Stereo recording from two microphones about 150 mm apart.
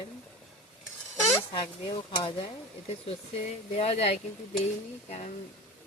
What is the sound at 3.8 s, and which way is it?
Speech, 45° left (ahead or behind).